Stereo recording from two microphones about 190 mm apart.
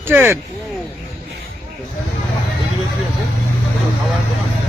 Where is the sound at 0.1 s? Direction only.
10° right (ahead or behind).